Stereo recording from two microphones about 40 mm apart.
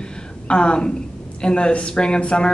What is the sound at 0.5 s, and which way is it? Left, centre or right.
A man's voice, left.